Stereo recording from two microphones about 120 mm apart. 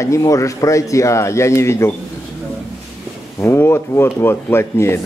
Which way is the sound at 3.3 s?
20° left (ahead or behind).